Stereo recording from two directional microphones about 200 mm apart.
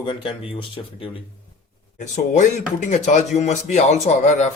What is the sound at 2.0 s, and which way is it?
Speech, 40° left (ahead or behind).